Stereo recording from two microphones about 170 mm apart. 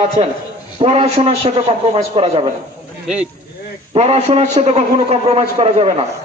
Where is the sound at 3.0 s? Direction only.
5° right (ahead or behind).